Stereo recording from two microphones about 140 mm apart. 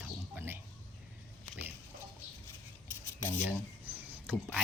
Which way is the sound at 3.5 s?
10° right (ahead or behind).